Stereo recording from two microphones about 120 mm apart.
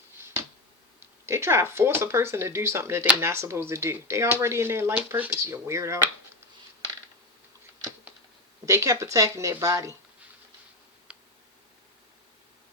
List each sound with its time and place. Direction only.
0.2 s finger snapping: 20° right (ahead or behind)
1.2 s speech: 20° right (ahead or behind)
8.6 s speech: 25° right (ahead or behind)
11.1 s tick: 10° right (ahead or behind)